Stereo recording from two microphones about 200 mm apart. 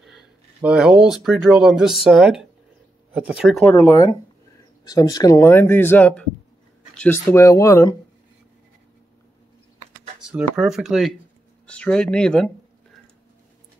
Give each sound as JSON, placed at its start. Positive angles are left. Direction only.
{"t": 0.0, "sound": "speech", "side_deg": 0}
{"t": 3.6, "sound": "speech", "side_deg": 10}
{"t": 10.2, "sound": "speech", "side_deg": -5}